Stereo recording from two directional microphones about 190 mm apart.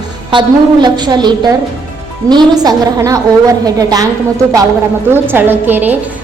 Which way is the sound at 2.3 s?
20° right (ahead or behind).